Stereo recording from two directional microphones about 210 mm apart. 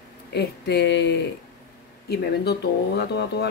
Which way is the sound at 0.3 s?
50° left (ahead or behind).